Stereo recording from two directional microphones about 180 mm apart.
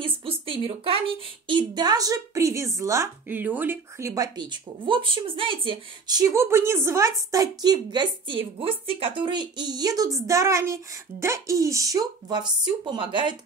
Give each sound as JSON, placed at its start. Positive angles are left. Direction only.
{"t": 0.0, "sound": "a woman's voice", "side_deg": -30}